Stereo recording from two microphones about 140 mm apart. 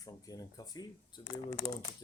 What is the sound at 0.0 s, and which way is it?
Speech, 25° left (ahead or behind).